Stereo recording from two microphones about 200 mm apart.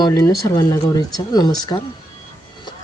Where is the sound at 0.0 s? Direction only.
20° left (ahead or behind).